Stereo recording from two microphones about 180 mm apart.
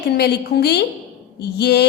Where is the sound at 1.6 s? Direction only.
65° left (ahead or behind).